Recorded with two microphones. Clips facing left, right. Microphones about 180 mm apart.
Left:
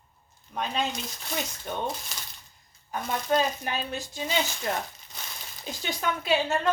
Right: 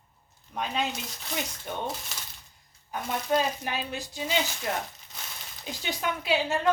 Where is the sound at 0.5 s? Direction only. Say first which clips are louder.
Left 1 dB; 10° right (ahead or behind).